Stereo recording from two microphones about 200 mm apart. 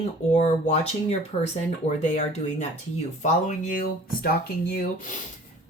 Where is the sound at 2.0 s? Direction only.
35° left (ahead or behind).